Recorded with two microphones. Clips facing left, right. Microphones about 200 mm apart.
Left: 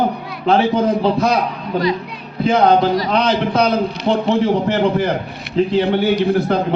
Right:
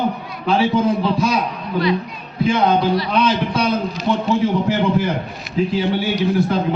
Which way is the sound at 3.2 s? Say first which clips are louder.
Left 2 dB; 60° left (ahead or behind).